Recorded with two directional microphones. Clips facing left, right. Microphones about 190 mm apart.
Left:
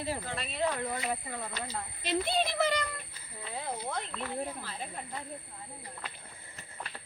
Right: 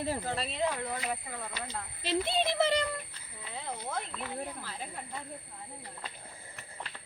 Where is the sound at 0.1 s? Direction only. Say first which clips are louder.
Right 3 dB; 35° right (ahead or behind).